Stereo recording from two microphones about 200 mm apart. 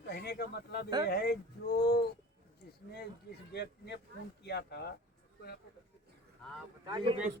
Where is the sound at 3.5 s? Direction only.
55° left (ahead or behind).